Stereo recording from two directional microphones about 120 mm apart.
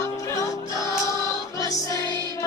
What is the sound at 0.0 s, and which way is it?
Music, 25° left (ahead or behind).